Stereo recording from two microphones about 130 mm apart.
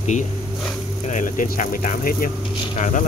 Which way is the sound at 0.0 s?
65° left (ahead or behind).